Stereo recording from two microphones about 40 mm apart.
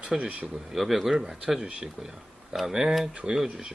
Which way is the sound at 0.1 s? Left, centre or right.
Right.